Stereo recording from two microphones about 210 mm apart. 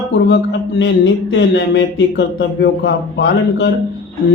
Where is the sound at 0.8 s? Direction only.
60° left (ahead or behind).